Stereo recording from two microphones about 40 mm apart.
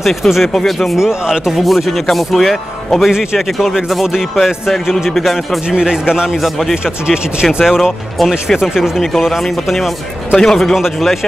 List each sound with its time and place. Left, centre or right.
0.0 s speech: centre
0.9 s speech: centre
1.5 s speech: centre
5.7 s speech: centre
7.5 s speech: centre
9.4 s speech: centre
10.3 s speech: centre
10.7 s speech: centre